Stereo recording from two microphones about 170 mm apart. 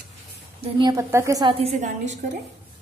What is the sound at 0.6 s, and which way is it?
Speech, 25° right (ahead or behind).